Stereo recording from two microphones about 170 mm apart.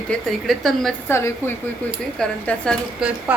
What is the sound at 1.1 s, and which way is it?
A woman's voice, 15° left (ahead or behind).